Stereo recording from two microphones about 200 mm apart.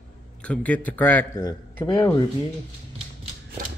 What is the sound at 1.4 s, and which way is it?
Speech, 20° left (ahead or behind).